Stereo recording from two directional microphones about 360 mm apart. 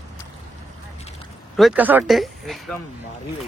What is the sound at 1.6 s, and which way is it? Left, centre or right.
Speech, centre.